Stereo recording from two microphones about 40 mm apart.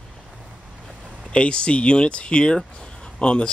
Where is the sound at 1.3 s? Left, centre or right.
Left.